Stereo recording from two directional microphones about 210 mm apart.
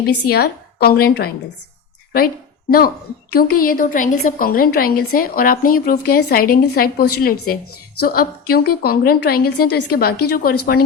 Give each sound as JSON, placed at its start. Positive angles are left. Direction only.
{"t": 0.3, "sound": "speech", "side_deg": 50}
{"t": 9.6, "sound": "a woman's voice", "side_deg": 90}
{"t": 9.9, "sound": "speech", "side_deg": 45}